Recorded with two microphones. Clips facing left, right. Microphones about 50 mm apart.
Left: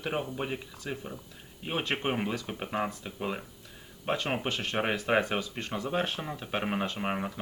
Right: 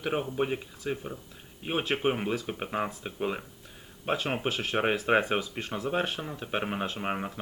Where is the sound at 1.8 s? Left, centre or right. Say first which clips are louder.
Right 3 dB; centre.